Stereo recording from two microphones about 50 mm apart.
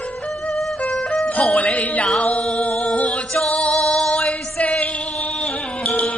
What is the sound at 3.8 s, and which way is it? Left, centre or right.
Music, centre.